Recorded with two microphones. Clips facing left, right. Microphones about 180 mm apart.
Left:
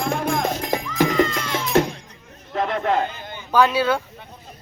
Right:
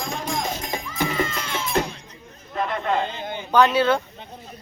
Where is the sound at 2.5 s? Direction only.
65° left (ahead or behind).